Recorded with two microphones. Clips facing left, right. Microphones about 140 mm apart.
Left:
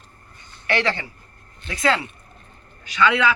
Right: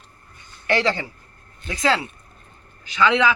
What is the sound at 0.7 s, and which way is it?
Speech, 30° right (ahead or behind).